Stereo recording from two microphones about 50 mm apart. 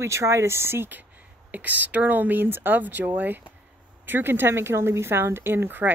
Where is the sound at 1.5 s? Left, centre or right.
Right.